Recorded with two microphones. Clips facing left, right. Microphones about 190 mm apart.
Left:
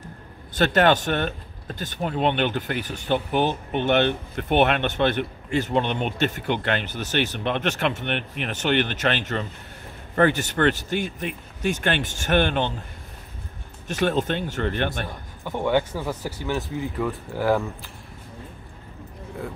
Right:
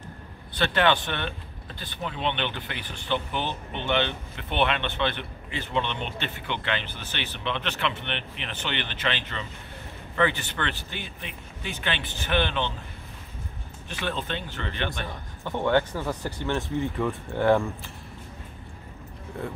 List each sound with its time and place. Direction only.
0.6 s speech: 45° left (ahead or behind)
13.8 s speech: 45° left (ahead or behind)
15.0 s speech: 10° left (ahead or behind)